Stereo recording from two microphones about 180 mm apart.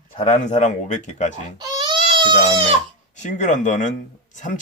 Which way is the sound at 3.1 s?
45° left (ahead or behind).